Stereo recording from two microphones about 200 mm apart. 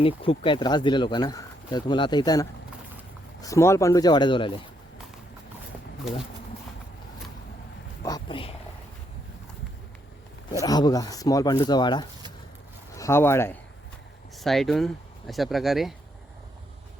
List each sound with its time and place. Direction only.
0.0 s speech: 25° left (ahead or behind)
8.0 s speech: 20° left (ahead or behind)
10.6 s speech: 20° left (ahead or behind)
14.3 s speech: centre (ahead or behind)